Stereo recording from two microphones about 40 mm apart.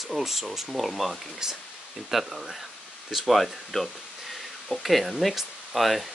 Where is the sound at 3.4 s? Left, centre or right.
Centre.